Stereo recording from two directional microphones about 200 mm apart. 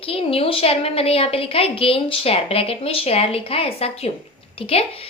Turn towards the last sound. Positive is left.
turn(degrees=30)  # may be behind; listen again after turning